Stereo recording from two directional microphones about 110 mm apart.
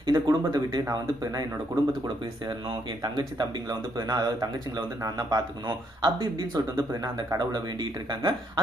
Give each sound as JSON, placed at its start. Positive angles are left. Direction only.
{"t": 0.0, "sound": "speech", "side_deg": -35}